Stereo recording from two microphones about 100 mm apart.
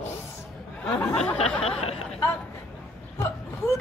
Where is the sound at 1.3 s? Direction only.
90° left.